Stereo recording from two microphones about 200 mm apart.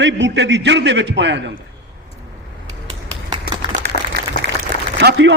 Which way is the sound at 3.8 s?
55° right (ahead or behind).